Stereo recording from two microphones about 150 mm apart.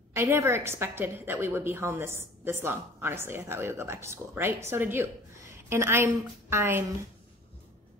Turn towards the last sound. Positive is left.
turn(degrees=-15)  # may be behind; listen again after turning